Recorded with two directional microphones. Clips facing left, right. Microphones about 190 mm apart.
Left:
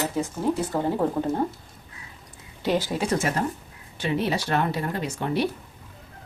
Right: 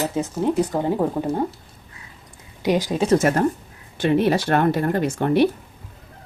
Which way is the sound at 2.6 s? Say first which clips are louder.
Right 4 dB; 15° right (ahead or behind).